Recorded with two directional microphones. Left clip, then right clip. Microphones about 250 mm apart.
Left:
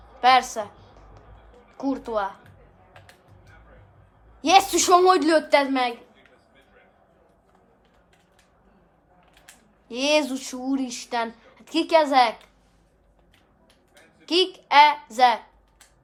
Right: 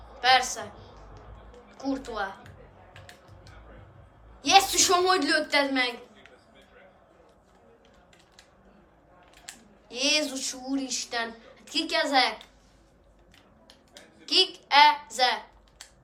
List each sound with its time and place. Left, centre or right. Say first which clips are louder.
0.2 s a sound: left 4 dB; left
1.7 s speech: left 6 dB; left
4.4 s speech: left 3 dB; left
9.9 s speech: left 4 dB; left
14.3 s a child's voice: left 2 dB; left